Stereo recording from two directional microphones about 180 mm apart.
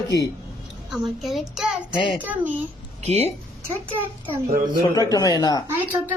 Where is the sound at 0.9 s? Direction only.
Centre (ahead or behind).